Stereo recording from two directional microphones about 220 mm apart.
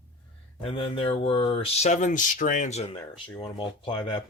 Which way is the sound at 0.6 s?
25° left (ahead or behind).